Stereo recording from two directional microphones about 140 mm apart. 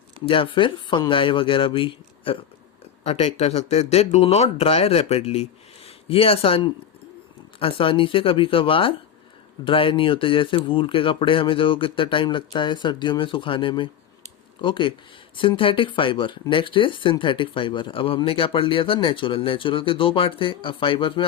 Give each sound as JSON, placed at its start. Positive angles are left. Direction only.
{"t": 0.3, "sound": "speech", "side_deg": 40}
{"t": 3.0, "sound": "speech", "side_deg": 50}